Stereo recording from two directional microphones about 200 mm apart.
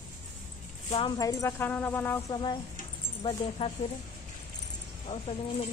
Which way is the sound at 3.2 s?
30° left (ahead or behind).